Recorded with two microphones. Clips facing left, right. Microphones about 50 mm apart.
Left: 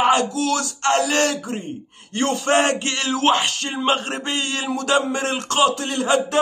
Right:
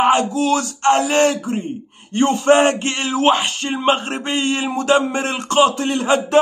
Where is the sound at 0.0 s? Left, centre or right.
Right.